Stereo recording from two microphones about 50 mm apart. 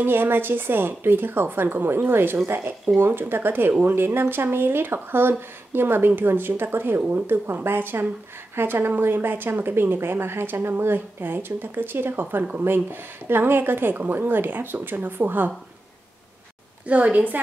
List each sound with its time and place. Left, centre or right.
0.0 s a woman's voice: right
7.2 s a woman's voice: right
16.8 s a woman's voice: right